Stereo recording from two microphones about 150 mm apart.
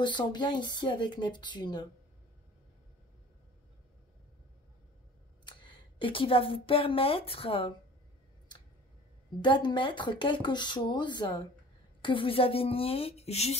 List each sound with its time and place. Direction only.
0.0 s speech: 30° left (ahead or behind)
5.4 s speech: 30° left (ahead or behind)
9.4 s speech: 30° left (ahead or behind)